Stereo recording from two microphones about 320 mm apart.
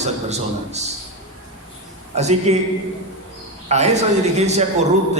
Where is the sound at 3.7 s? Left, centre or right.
Right.